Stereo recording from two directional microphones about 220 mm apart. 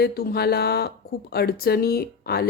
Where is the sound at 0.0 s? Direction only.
45° left (ahead or behind).